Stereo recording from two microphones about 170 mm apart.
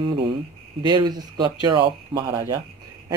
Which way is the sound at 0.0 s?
30° right (ahead or behind).